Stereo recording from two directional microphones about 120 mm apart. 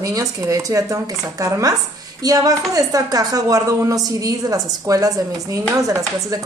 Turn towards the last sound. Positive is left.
turn(degrees=-30)  # may be behind; listen again after turning